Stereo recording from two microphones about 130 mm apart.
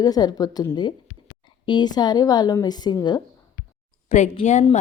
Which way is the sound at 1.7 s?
35° left (ahead or behind).